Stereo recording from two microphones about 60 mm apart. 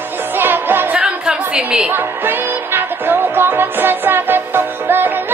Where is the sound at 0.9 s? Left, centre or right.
Centre.